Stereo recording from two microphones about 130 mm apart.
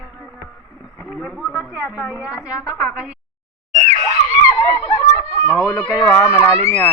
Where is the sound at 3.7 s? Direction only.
50° right (ahead or behind).